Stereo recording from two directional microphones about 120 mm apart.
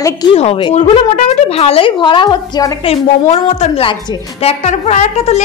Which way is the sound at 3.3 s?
65° left (ahead or behind).